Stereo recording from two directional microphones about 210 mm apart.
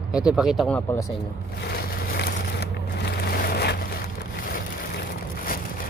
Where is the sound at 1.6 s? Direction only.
50° left (ahead or behind).